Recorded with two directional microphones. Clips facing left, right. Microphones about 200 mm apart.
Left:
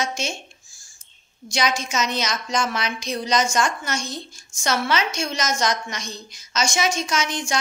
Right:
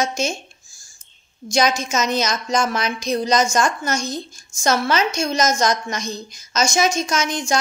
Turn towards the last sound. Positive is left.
turn(degrees=-40)  # may be behind; listen again after turning